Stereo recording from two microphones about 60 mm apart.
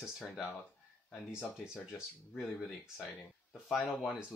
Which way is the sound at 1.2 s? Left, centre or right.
Centre.